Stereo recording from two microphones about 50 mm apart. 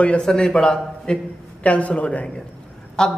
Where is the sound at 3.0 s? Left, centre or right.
Centre.